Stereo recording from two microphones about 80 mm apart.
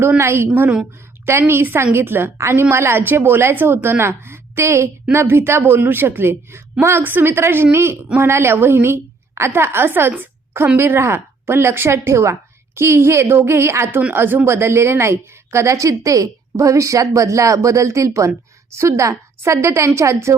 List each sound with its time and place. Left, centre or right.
0.2 s a woman's voice: right